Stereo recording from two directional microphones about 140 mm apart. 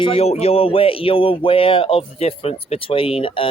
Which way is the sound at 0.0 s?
40° left (ahead or behind).